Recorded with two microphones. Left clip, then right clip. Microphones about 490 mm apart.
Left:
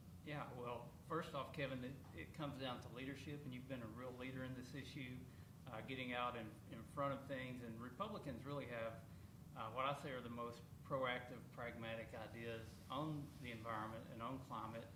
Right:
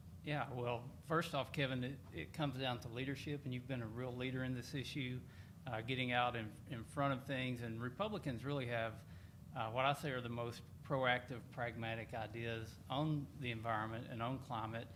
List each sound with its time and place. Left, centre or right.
0.3 s a man's voice: right